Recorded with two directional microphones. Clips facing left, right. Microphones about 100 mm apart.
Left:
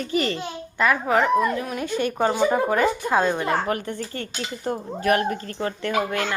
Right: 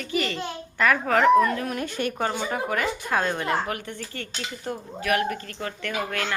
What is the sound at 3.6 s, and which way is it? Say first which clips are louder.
A woman's voice: left 5 dB; 35° left (ahead or behind).